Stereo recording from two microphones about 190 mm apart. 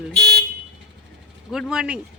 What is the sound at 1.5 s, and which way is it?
Speech, centre (ahead or behind).